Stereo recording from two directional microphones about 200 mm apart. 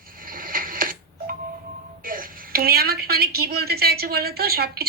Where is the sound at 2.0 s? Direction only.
45° right (ahead or behind).